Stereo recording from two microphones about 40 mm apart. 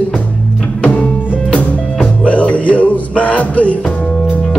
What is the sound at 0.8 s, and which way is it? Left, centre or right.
Music, left.